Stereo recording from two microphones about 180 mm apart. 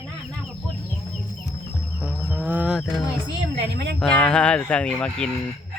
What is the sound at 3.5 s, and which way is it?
Speech, 70° right (ahead or behind).